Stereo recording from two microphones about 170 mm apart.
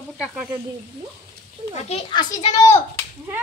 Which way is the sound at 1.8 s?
30° left (ahead or behind).